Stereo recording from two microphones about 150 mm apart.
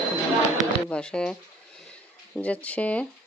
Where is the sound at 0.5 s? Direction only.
5° left (ahead or behind).